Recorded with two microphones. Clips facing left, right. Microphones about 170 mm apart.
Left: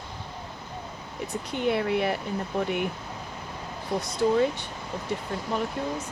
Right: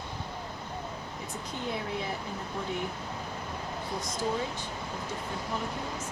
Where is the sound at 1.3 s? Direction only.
70° left (ahead or behind).